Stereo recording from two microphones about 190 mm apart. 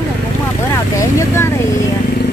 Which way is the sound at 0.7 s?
15° left (ahead or behind).